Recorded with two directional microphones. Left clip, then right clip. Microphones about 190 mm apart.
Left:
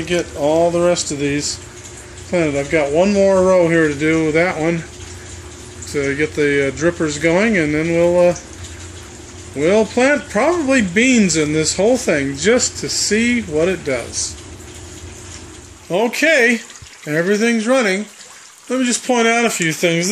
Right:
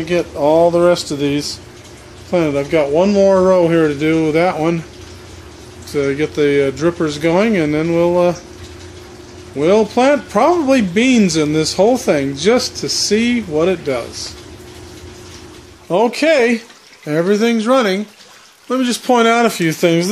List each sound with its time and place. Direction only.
0.0 s speech: 10° right (ahead or behind)
5.9 s speech: 10° right (ahead or behind)
9.6 s speech: 10° right (ahead or behind)
15.9 s speech: 15° right (ahead or behind)